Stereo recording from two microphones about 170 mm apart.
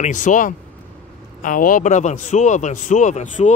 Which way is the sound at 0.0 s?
50° left (ahead or behind).